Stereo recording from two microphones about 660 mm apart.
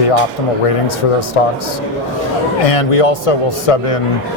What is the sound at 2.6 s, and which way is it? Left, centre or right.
Speech, left.